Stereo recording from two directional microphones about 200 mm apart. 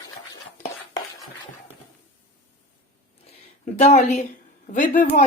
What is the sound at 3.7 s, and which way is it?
Speech, 35° left (ahead or behind).